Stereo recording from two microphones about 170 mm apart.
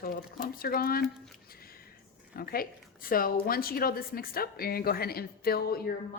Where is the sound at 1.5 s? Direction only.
60° left (ahead or behind).